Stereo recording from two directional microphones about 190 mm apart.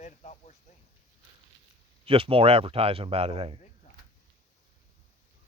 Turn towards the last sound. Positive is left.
turn(degrees=-30)  # may be behind; listen again after turning